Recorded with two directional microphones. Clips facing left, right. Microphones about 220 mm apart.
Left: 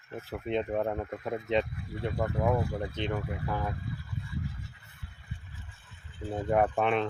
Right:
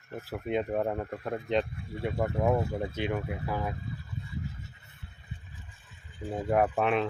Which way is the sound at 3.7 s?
20° right (ahead or behind).